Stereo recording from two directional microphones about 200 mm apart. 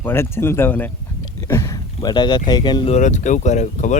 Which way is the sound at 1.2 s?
15° left (ahead or behind).